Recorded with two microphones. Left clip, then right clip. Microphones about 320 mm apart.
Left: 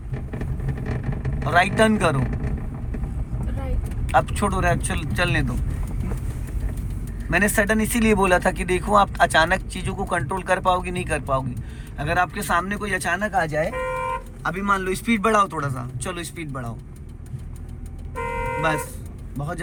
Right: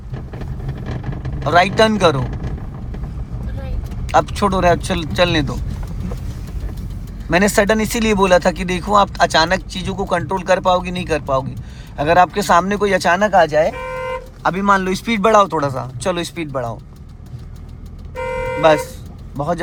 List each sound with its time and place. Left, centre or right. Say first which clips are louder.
1.5 s speech: right 5 dB; centre
4.0 s speech: right 5 dB; centre
7.3 s speech: right 6 dB; centre
18.6 s a man's voice: right 15 dB; centre